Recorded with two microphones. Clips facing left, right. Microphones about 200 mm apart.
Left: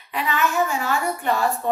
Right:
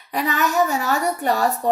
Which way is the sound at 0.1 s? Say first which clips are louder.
Right 2 dB; 40° right (ahead or behind).